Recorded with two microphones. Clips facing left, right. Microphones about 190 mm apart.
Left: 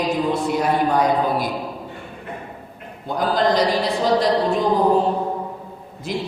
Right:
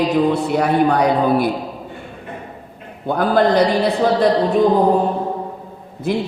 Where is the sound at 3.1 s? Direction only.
60° right (ahead or behind).